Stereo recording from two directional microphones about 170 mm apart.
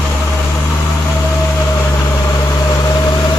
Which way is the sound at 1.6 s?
15° left (ahead or behind).